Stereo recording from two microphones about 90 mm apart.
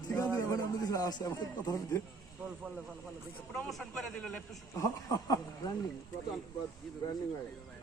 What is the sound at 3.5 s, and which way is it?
Speech, 5° left (ahead or behind).